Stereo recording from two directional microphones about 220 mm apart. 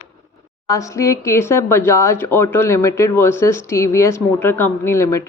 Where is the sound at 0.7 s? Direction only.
15° left (ahead or behind).